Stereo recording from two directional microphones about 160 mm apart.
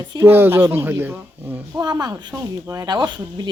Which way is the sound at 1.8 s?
25° right (ahead or behind).